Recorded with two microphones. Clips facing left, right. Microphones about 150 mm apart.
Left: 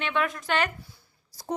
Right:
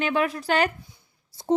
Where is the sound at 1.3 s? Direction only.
25° right (ahead or behind).